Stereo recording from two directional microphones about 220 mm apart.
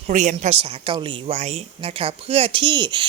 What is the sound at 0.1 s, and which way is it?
A woman's voice, 30° right (ahead or behind).